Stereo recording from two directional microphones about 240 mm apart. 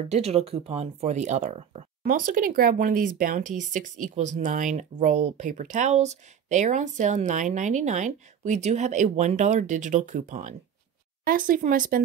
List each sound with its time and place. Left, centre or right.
0.1 s speech: right